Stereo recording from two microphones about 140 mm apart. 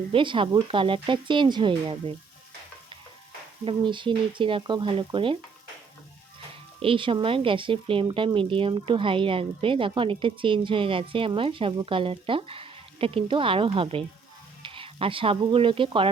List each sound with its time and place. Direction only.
0.1 s speech: 35° right (ahead or behind)
3.6 s speech: 35° right (ahead or behind)
6.8 s speech: 40° right (ahead or behind)